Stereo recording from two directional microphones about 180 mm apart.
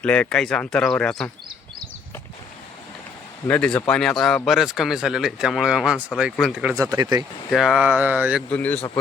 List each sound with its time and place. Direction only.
0.0 s speech: 5° left (ahead or behind)
3.4 s speech: 5° left (ahead or behind)
6.7 s speech: 20° right (ahead or behind)
7.5 s speech: 5° right (ahead or behind)
8.4 s a man's voice: 10° left (ahead or behind)